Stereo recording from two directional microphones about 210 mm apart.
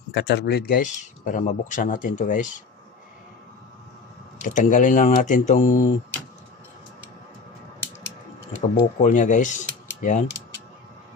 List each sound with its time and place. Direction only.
0.1 s speech: 55° left (ahead or behind); by 2.6 s 35° left (ahead or behind)
4.4 s speech: 40° left (ahead or behind)
9.0 s speech: 35° left (ahead or behind)